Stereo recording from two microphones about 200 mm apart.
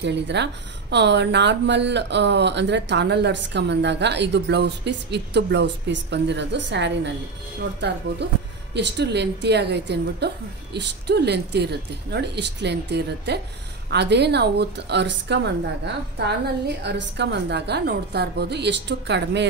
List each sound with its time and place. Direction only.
0.0 s speech: 60° right (ahead or behind)